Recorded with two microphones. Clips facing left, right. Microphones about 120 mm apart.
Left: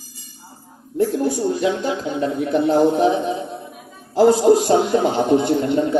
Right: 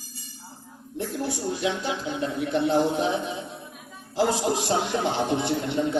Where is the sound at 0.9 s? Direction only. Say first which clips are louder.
Left 11 dB; 40° left (ahead or behind).